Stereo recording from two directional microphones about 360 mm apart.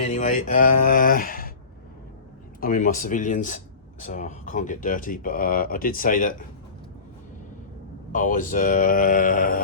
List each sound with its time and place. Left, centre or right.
0.0 s speech: centre
2.6 s speech: left
8.1 s speech: left